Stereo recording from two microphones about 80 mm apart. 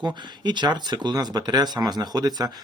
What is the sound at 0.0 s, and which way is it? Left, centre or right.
Speech, right.